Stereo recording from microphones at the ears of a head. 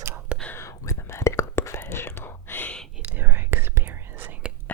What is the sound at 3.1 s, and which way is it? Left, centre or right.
Whispering, right.